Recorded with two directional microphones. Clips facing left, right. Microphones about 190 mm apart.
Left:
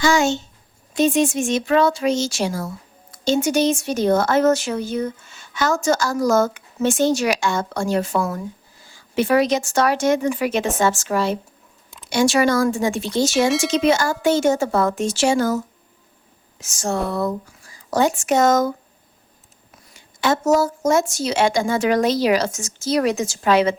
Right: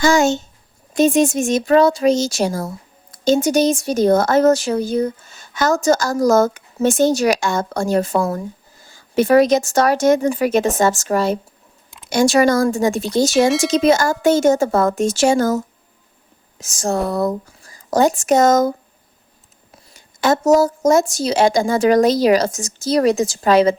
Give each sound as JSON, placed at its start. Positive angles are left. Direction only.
{"t": 0.0, "sound": "speech", "side_deg": -45}
{"t": 13.5, "sound": "speech", "side_deg": 0}
{"t": 13.7, "sound": "speech", "side_deg": -40}
{"t": 20.0, "sound": "speech", "side_deg": -40}